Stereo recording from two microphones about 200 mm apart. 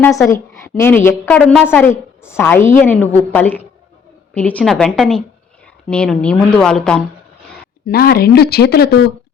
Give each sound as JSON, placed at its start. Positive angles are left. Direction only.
{"t": 0.3, "sound": "a woman's voice", "side_deg": 15}
{"t": 7.9, "sound": "speech", "side_deg": 50}